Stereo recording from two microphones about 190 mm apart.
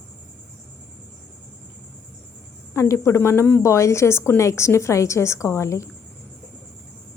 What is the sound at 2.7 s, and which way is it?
A woman's voice, 15° left (ahead or behind).